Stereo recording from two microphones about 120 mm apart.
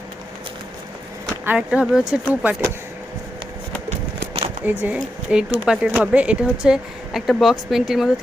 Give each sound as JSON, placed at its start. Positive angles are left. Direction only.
{"t": 1.5, "sound": "speech", "side_deg": -10}
{"t": 4.6, "sound": "a woman's voice", "side_deg": -10}